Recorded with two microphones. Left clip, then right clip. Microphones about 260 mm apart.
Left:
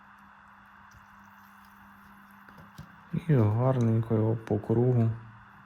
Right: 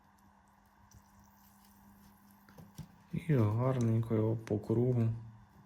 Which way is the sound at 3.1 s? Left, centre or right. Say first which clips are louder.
Left 6 dB; left.